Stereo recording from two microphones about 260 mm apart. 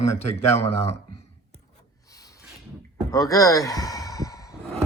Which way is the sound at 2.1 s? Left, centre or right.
Centre.